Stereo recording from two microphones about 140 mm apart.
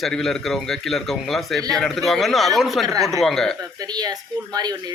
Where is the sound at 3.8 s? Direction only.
30° right (ahead or behind).